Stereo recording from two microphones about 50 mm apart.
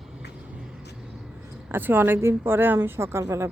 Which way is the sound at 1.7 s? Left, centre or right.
Right.